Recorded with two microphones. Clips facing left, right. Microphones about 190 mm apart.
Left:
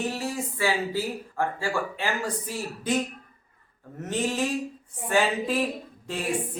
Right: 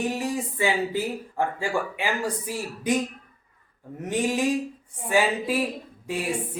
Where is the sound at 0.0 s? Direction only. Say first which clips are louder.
Right 3 dB; 15° right (ahead or behind).